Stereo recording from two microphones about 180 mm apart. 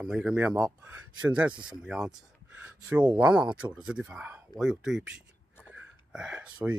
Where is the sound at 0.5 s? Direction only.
20° right (ahead or behind).